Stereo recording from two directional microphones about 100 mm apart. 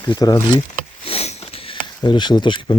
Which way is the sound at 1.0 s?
85° left.